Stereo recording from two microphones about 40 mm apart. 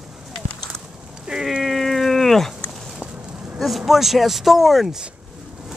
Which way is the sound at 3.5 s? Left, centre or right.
Centre.